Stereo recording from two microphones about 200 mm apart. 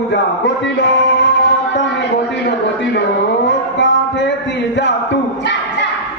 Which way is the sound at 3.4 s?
60° left (ahead or behind).